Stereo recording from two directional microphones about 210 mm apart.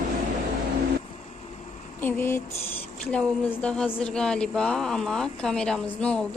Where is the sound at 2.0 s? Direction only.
10° left (ahead or behind).